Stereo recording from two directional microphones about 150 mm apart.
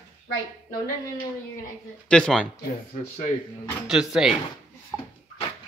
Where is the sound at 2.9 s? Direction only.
60° left (ahead or behind).